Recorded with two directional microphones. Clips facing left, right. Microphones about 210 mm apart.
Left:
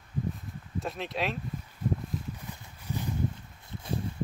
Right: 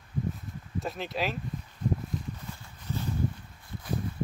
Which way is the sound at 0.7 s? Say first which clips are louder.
Right 1 dB; centre (ahead or behind).